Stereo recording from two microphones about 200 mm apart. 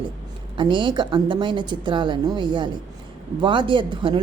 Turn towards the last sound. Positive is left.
turn(degrees=-25)  # may be behind; listen again after turning